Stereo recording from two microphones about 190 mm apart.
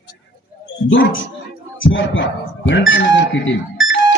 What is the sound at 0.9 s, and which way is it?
Speech, 85° left.